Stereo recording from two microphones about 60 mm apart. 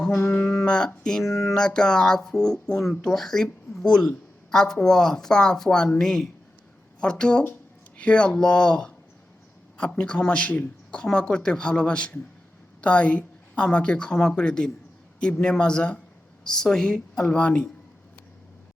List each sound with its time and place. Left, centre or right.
0.1 s a sound: left
0.6 s speech: centre
3.8 s speech: centre